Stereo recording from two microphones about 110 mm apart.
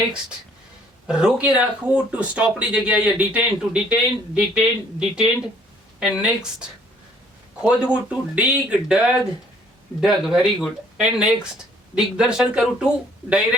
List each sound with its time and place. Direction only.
1.0 s speech: 10° right (ahead or behind)